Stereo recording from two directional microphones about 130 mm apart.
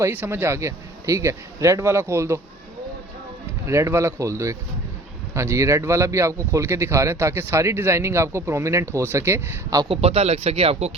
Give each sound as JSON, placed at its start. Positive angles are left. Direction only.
{"t": 0.0, "sound": "a man's voice", "side_deg": -20}
{"t": 3.7, "sound": "a man's voice", "side_deg": -20}
{"t": 9.9, "sound": "speech", "side_deg": -50}